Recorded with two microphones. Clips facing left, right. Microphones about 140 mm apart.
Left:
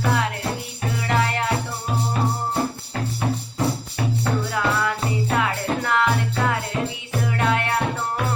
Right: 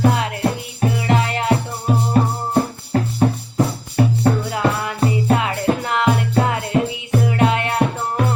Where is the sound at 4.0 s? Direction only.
45° right (ahead or behind).